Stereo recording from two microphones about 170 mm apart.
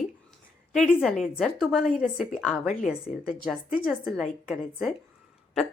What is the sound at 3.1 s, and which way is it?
Speech, 50° left (ahead or behind).